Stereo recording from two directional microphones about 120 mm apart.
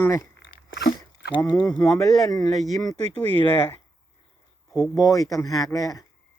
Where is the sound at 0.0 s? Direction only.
25° left (ahead or behind).